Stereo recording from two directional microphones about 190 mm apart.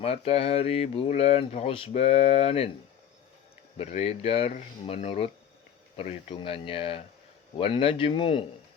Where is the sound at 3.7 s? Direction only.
35° left (ahead or behind).